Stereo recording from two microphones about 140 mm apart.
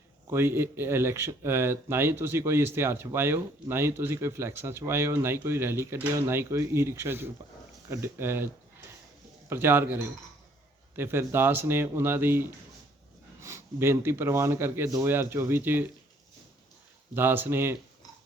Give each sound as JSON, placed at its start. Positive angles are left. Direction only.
{"t": 0.3, "sound": "speech", "side_deg": -15}
{"t": 9.5, "sound": "speech", "side_deg": -15}
{"t": 17.2, "sound": "speech", "side_deg": -15}